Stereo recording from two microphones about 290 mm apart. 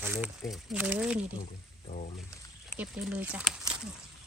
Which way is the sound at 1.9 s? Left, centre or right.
Left.